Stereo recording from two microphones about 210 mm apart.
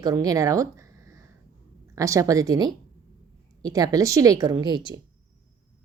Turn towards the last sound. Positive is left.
turn(degrees=-20)  # may be behind; listen again after turning